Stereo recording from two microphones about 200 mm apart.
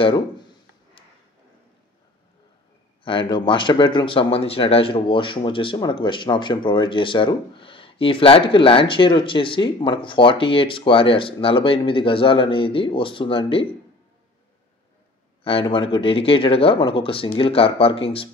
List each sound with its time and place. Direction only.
3.0 s speech: 25° left (ahead or behind)
15.4 s speech: 25° left (ahead or behind)